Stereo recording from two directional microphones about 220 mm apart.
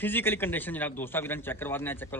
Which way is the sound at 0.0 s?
10° left (ahead or behind).